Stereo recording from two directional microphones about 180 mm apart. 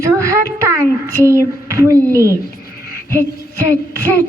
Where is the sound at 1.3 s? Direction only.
15° right (ahead or behind).